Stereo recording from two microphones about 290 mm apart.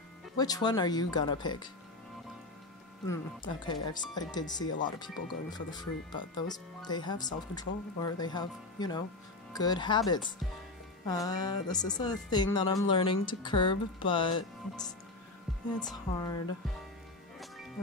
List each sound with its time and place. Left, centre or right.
0.4 s speech: centre
3.1 s speech: centre
15.9 s speech: centre